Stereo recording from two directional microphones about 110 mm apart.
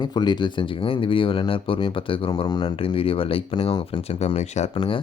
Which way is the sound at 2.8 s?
55° left (ahead or behind).